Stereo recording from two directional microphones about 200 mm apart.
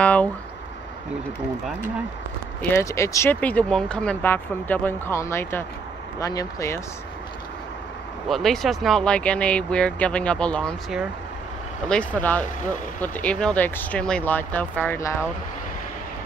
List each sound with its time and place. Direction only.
0.0 s speech: 5° left (ahead or behind)
2.6 s speech: 15° left (ahead or behind)
8.3 s speech: centre (ahead or behind)